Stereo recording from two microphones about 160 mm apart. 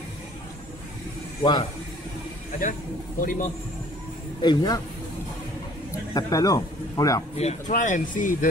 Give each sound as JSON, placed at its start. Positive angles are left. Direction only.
{"t": 1.4, "sound": "a man's voice", "side_deg": 30}
{"t": 3.2, "sound": "a man's voice", "side_deg": 55}
{"t": 4.4, "sound": "a man's voice", "side_deg": 25}
{"t": 6.1, "sound": "a man's voice", "side_deg": 20}
{"t": 7.3, "sound": "speech", "side_deg": 45}